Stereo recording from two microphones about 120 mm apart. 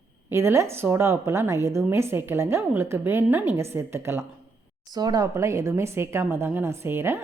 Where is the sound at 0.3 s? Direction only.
25° right (ahead or behind).